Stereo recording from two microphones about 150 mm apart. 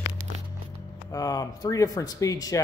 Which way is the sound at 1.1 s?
25° left (ahead or behind).